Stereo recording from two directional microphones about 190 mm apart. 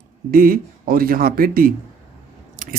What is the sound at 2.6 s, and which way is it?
Scissors, 40° right (ahead or behind).